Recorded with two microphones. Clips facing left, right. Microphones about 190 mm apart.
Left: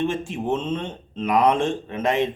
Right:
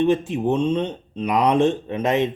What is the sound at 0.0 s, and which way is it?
Speech, 15° right (ahead or behind).